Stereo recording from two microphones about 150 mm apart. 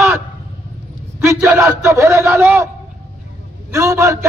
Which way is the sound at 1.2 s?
20° right (ahead or behind).